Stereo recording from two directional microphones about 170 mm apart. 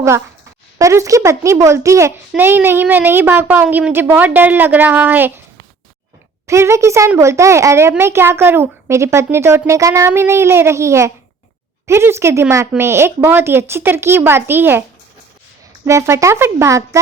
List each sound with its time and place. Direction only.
0.8 s a child's voice: 20° right (ahead or behind)
6.5 s a child's voice: 15° right (ahead or behind)